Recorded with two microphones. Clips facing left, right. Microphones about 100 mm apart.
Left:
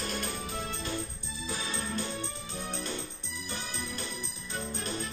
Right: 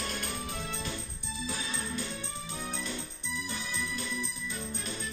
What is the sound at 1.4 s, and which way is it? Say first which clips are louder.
Music: left 2 dB; 75° left (ahead or behind).